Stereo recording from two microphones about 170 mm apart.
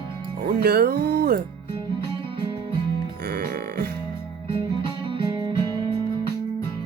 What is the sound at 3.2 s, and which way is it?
Music, 65° right (ahead or behind).